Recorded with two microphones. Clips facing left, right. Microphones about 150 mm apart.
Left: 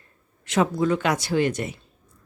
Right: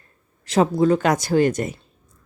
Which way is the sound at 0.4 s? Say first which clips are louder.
Right 4 dB; 35° right (ahead or behind).